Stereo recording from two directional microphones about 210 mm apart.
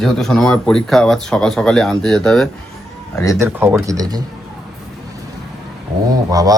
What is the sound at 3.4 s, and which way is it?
Mantra, 10° right (ahead or behind).